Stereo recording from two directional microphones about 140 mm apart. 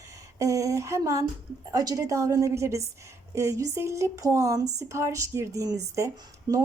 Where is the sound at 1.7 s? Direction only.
25° right (ahead or behind).